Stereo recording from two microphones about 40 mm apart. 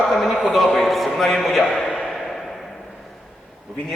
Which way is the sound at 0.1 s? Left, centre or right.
Centre.